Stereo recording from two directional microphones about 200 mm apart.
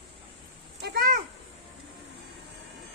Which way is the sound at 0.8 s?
50° right (ahead or behind).